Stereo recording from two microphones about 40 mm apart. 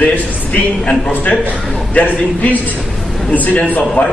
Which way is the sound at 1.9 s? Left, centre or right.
Left.